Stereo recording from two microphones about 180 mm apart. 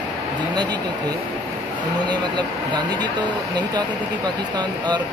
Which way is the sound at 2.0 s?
25° right (ahead or behind).